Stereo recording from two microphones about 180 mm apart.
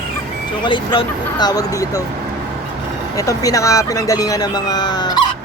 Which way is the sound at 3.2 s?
20° left (ahead or behind).